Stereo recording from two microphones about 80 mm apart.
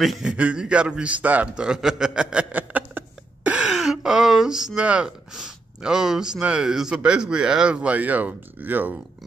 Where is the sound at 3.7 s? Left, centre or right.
Centre.